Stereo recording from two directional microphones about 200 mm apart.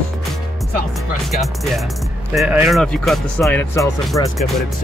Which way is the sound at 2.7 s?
Centre (ahead or behind).